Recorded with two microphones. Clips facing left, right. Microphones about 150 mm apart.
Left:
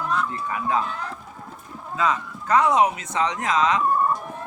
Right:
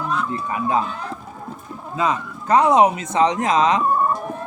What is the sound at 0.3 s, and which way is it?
Speech, 20° right (ahead or behind).